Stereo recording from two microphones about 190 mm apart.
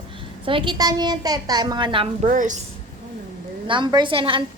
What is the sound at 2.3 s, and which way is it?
Speech, 40° right (ahead or behind).